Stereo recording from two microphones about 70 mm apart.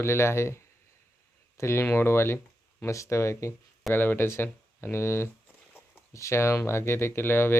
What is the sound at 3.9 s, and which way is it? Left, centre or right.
Speech, left.